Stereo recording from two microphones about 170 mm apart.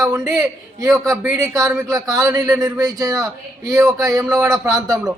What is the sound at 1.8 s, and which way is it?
A man's voice, 20° right (ahead or behind).